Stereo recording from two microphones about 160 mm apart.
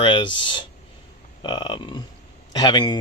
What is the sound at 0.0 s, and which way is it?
Speech, 30° left (ahead or behind).